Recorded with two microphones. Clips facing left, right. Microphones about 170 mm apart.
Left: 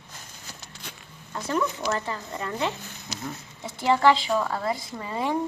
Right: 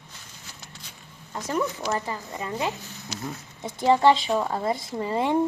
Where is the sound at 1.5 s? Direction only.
10° right (ahead or behind).